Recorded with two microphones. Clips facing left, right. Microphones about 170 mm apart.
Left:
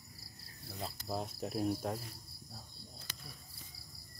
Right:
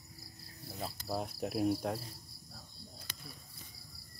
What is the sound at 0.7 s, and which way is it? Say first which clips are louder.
Cricket: right 2 dB; 5° right (ahead or behind).